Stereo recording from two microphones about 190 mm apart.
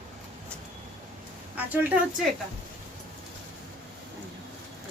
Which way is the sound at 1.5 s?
10° right (ahead or behind).